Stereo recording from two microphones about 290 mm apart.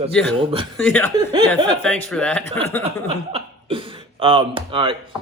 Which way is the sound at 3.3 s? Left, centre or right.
Centre.